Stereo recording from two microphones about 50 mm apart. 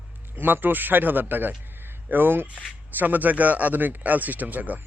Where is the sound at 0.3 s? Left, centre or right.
Right.